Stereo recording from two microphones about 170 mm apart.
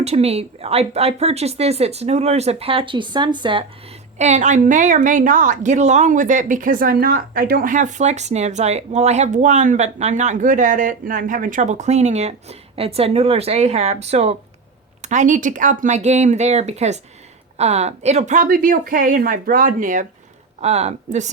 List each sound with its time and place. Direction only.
0.0 s a woman's voice: 40° right (ahead or behind)
20.6 s a woman's voice: 40° right (ahead or behind)